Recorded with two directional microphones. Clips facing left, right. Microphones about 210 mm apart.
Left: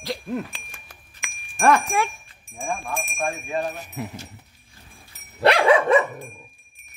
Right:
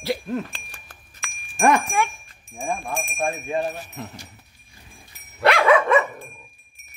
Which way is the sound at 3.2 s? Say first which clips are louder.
Right 2 dB; 20° right (ahead or behind).